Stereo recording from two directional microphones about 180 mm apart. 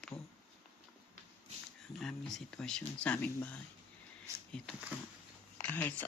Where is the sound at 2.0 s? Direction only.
Centre (ahead or behind).